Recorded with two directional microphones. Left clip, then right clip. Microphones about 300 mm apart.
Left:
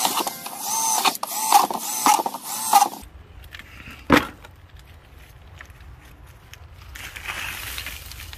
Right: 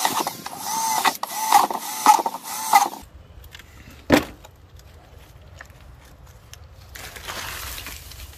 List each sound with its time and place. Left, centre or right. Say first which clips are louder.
0.0 s printer: even; centre
6.9 s crushing: left 2 dB; centre